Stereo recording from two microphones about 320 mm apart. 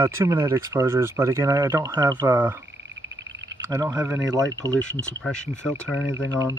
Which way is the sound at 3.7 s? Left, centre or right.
Centre.